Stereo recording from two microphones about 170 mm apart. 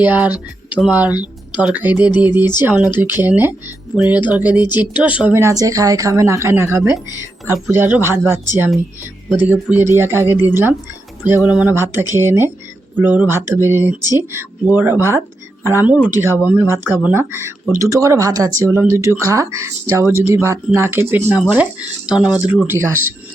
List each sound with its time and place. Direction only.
0.0 s speech: 10° right (ahead or behind)